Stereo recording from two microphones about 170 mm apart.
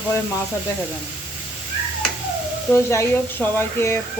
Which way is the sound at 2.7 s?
15° left (ahead or behind).